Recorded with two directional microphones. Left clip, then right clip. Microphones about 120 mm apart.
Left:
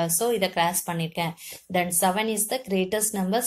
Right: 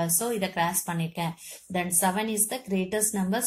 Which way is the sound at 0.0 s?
35° left (ahead or behind).